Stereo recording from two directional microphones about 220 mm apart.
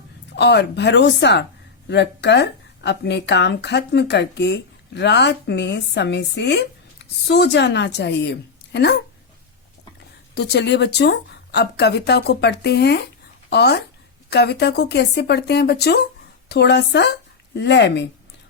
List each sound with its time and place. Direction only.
0.3 s speech: 50° left (ahead or behind)
10.3 s speech: 50° left (ahead or behind)